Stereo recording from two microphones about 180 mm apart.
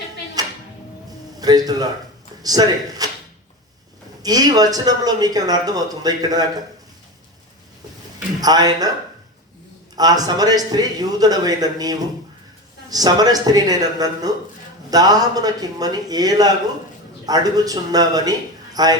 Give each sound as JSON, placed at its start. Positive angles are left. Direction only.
{"t": 0.4, "sound": "music", "side_deg": -20}
{"t": 1.4, "sound": "a man's voice", "side_deg": -20}
{"t": 4.2, "sound": "speech", "side_deg": -20}
{"t": 8.4, "sound": "speech", "side_deg": -20}
{"t": 9.9, "sound": "speech", "side_deg": -20}